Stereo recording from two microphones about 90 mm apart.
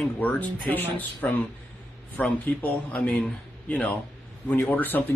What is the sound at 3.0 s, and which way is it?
A man's voice, 5° left (ahead or behind).